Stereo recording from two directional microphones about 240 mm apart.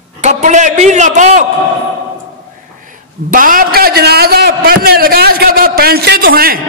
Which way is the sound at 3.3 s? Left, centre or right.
Right.